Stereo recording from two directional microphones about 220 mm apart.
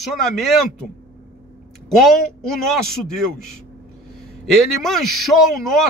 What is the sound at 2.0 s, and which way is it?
A man's voice, centre (ahead or behind).